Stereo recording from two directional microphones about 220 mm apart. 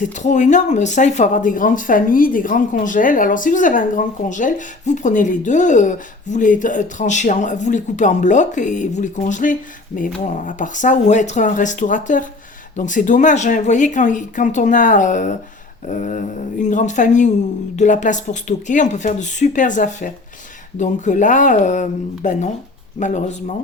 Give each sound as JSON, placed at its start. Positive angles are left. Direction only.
{"t": 0.0, "sound": "speech", "side_deg": 35}